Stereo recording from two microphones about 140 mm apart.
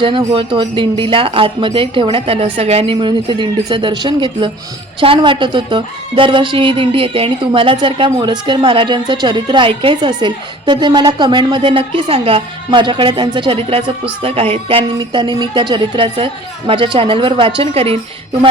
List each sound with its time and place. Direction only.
0.3 s a woman's voice: 40° right (ahead or behind)